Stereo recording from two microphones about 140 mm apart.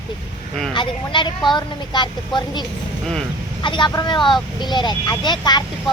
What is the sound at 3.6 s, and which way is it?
Speech, 35° left (ahead or behind).